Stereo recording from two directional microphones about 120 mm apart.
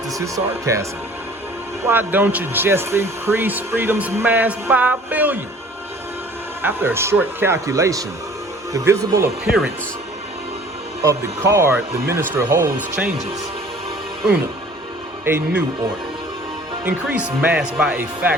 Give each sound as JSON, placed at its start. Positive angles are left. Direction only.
{"t": 0.1, "sound": "speech", "side_deg": -25}
{"t": 6.6, "sound": "speech", "side_deg": -15}
{"t": 11.0, "sound": "speech", "side_deg": -25}
{"t": 15.2, "sound": "speech", "side_deg": -20}
{"t": 16.8, "sound": "speech", "side_deg": -10}